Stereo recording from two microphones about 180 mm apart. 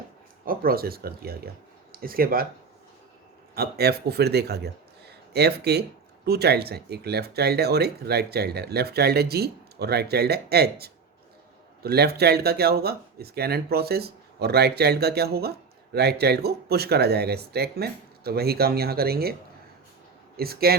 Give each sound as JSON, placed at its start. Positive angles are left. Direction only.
{"t": 0.4, "sound": "speech", "side_deg": -55}
{"t": 3.5, "sound": "speech", "side_deg": -60}